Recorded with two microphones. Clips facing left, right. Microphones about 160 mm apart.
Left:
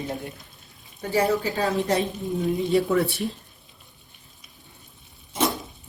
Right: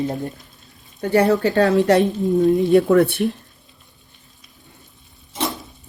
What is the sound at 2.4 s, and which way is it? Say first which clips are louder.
Speech: right 7 dB; 55° right (ahead or behind).